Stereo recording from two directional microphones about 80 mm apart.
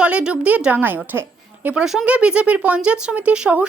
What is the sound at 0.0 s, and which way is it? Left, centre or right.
A woman's voice, centre.